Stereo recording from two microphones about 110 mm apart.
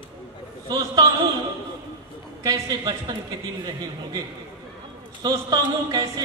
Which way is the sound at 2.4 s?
35° right (ahead or behind).